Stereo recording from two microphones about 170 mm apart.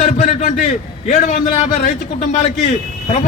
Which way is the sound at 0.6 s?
45° left (ahead or behind).